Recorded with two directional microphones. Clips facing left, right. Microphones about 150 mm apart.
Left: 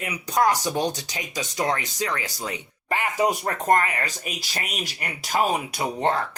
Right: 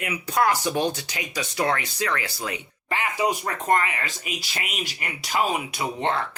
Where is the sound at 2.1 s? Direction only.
40° left (ahead or behind).